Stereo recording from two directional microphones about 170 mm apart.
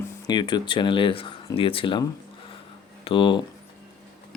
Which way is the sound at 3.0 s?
30° left (ahead or behind).